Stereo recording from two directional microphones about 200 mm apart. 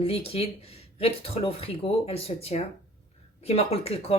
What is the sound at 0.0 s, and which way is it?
Speech, 30° left (ahead or behind).